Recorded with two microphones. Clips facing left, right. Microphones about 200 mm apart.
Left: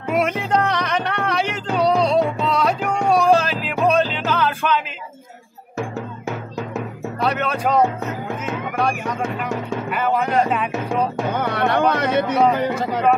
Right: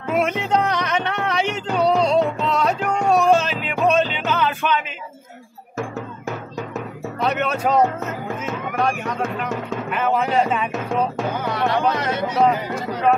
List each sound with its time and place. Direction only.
0.1 s music: 5° left (ahead or behind)
7.2 s speech: centre (ahead or behind)
11.3 s speech: 60° left (ahead or behind)